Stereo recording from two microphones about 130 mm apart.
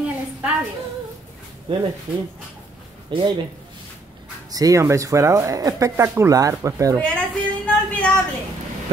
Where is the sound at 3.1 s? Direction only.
40° right (ahead or behind).